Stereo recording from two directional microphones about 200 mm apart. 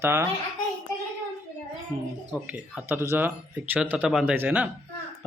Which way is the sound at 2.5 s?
5° right (ahead or behind).